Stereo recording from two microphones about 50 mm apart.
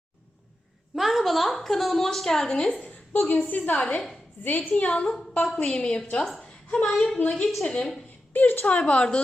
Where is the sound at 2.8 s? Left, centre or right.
Left.